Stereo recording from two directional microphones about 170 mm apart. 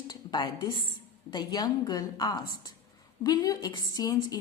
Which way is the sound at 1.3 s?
25° left (ahead or behind).